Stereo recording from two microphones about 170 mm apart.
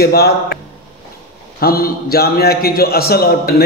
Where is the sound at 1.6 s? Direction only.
60° left (ahead or behind).